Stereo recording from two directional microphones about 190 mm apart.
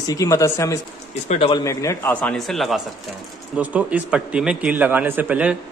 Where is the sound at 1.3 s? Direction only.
30° left (ahead or behind).